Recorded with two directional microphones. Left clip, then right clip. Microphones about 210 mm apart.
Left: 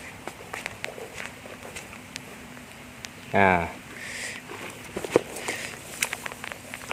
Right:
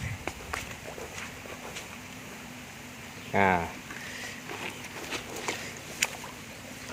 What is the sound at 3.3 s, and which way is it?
Speech, 30° left (ahead or behind).